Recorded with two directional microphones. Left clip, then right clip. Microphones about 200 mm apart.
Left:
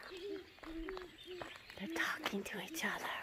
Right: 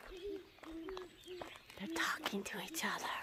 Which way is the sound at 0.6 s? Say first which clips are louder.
Left 1 dB; 15° left (ahead or behind).